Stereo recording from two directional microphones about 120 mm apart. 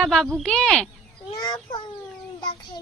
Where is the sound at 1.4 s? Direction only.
35° left (ahead or behind).